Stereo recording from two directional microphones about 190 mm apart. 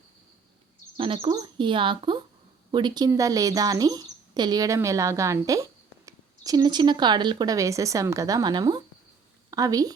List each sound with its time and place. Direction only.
0.9 s a woman's voice: 30° right (ahead or behind)